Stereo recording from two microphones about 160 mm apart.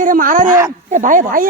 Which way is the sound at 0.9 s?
55° right (ahead or behind).